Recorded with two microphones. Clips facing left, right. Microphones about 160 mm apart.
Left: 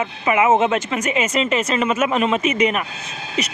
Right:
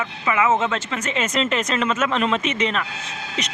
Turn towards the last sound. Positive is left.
turn(degrees=5)  # may be behind; listen again after turning